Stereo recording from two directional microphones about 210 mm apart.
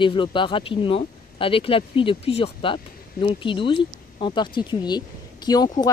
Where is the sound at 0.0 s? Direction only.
25° left (ahead or behind).